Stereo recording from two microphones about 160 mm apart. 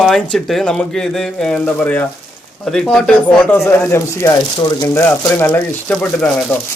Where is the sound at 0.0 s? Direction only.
Centre (ahead or behind).